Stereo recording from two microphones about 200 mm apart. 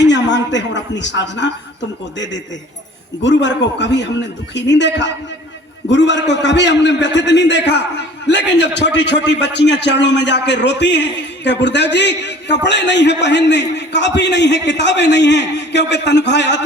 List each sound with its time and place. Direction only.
0.0 s a man's voice: 60° left (ahead or behind)